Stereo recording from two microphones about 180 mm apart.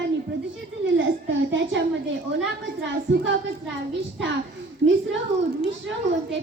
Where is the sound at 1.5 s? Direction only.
90° right.